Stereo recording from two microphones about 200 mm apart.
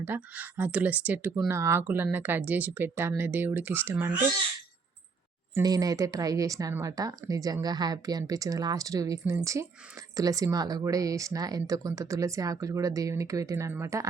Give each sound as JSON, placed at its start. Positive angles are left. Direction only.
{"t": 0.0, "sound": "speech", "side_deg": -10}
{"t": 5.5, "sound": "speech", "side_deg": -20}